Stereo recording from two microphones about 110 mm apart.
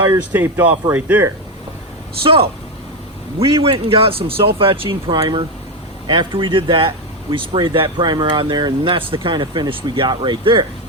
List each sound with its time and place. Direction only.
0.3 s speech: 20° right (ahead or behind)
2.2 s speech: 55° right (ahead or behind)